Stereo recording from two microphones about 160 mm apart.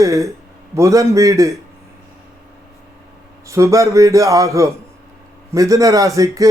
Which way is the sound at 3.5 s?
20° right (ahead or behind).